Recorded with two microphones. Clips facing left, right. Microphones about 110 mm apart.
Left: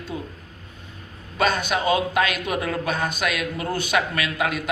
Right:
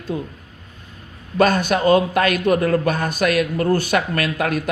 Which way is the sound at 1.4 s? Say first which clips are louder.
Right 5 dB; 50° right (ahead or behind).